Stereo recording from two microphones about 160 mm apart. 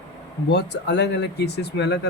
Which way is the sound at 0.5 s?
90° left.